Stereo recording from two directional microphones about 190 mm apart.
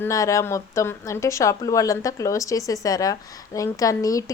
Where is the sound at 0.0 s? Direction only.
15° left (ahead or behind).